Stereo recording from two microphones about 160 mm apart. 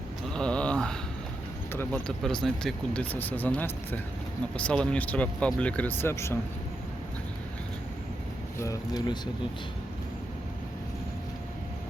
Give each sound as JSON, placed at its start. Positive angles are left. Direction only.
{"t": 0.3, "sound": "a sound", "side_deg": 5}
{"t": 1.7, "sound": "speech", "side_deg": 10}
{"t": 8.5, "sound": "speech", "side_deg": 20}